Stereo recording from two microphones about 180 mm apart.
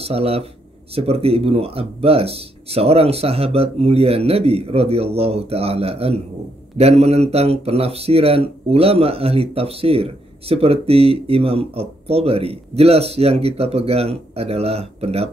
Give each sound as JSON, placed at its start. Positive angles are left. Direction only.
{"t": 0.0, "sound": "a man's voice", "side_deg": -35}